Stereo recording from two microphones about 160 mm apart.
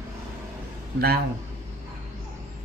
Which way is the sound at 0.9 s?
75° right (ahead or behind).